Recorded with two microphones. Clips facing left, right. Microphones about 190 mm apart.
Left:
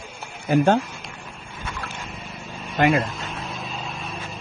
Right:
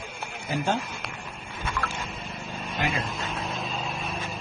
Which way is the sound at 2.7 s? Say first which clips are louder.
Left 10 dB; 60° left (ahead or behind).